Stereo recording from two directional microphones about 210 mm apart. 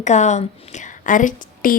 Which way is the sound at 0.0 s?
35° left (ahead or behind).